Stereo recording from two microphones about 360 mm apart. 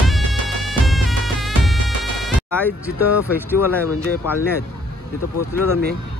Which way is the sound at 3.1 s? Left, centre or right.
Centre.